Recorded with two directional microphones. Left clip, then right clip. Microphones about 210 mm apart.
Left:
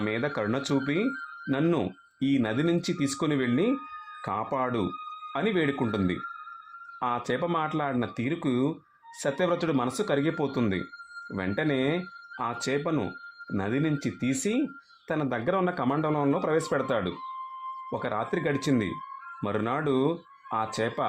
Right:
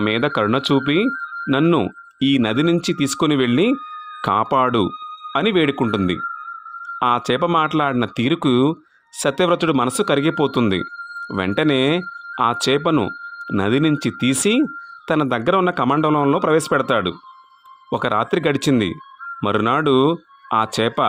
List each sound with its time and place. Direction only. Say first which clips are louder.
0.0 s speech: right 11 dB; 35° right (ahead or behind)
7.3 s speech: right 11 dB; 30° right (ahead or behind)